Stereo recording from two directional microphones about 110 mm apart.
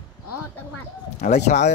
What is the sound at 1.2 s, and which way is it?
Speech, 90° left.